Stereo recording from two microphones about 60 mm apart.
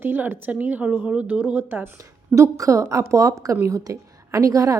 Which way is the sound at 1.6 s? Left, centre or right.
Right.